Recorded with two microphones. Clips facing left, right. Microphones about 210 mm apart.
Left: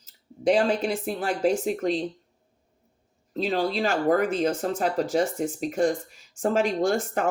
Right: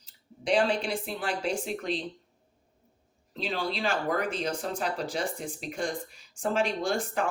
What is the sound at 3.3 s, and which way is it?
Speech, 45° left (ahead or behind).